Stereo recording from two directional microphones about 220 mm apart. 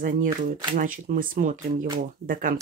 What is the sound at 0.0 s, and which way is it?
Speech, 35° right (ahead or behind).